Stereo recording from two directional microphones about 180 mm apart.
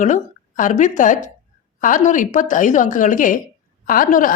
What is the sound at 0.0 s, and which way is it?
A woman's voice, 45° left (ahead or behind).